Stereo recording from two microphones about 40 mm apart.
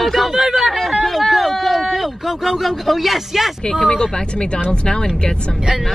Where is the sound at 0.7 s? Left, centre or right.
Centre.